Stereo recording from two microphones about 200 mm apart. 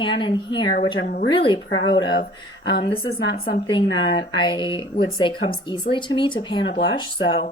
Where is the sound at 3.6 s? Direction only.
25° left (ahead or behind).